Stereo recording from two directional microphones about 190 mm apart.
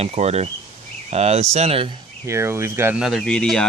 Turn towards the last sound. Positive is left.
turn(degrees=5)  # may be behind; listen again after turning